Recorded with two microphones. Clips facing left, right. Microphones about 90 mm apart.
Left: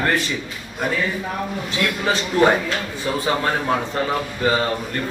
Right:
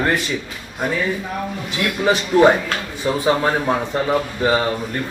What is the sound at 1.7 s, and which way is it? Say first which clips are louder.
A man's voice: right 3 dB; 15° right (ahead or behind).